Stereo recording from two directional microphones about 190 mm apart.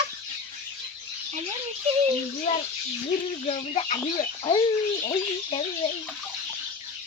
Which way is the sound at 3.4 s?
35° left (ahead or behind).